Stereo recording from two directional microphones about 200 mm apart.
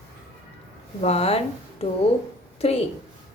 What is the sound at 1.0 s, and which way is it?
A woman's voice, 30° left (ahead or behind).